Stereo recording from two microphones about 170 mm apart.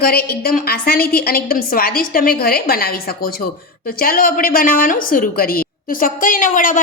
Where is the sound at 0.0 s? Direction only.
65° left (ahead or behind).